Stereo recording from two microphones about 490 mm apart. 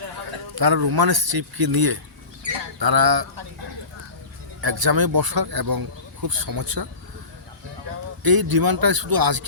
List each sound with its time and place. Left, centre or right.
0.6 s speech: right
2.5 s bird: right
4.6 s speech: right
8.2 s speech: right